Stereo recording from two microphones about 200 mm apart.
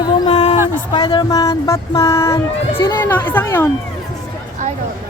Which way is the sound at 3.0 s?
10° left (ahead or behind).